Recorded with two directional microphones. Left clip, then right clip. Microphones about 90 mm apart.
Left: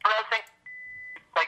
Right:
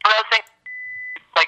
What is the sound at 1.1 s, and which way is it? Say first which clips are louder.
Beep: right 8 dB; 35° right (ahead or behind).